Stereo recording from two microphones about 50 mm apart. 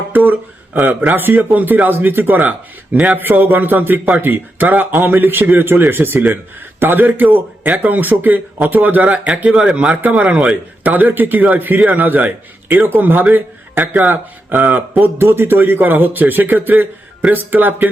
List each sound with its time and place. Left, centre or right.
0.1 s a sound: right
0.8 s a man's voice: right
9.5 s speech: centre
9.7 s speech: right
10.8 s a man's voice: right